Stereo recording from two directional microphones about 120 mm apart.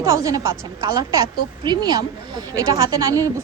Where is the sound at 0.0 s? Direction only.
25° right (ahead or behind).